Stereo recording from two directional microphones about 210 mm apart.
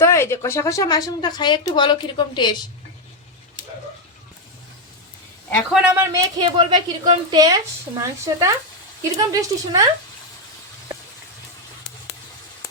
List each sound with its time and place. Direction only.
0.0 s speech: 15° left (ahead or behind)
5.7 s a woman's voice: 5° right (ahead or behind)
6.3 s a woman's voice: 20° right (ahead or behind)